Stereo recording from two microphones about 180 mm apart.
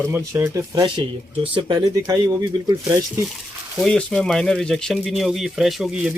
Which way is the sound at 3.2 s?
Centre (ahead or behind).